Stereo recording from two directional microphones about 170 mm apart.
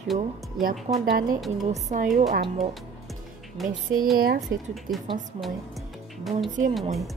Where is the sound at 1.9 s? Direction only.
45° right (ahead or behind).